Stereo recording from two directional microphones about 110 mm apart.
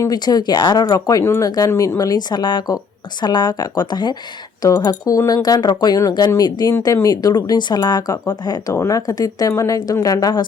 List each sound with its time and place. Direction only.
0.0 s speech: 35° left (ahead or behind)